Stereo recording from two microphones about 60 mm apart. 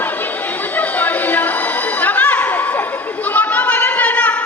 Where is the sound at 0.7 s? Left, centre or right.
Left.